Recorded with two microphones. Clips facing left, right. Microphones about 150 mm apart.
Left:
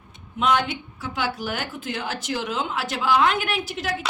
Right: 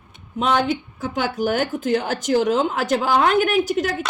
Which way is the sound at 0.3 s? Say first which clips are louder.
Right 3 dB; 40° right (ahead or behind).